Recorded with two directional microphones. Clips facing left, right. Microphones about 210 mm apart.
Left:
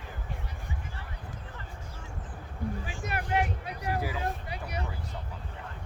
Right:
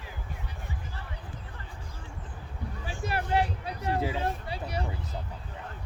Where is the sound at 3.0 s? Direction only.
30° right (ahead or behind).